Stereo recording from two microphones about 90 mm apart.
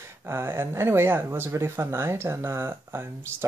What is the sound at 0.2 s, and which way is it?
Speech, 30° right (ahead or behind).